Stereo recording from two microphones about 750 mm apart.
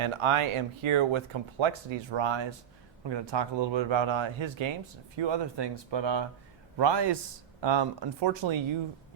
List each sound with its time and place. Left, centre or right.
0.0 s speech: right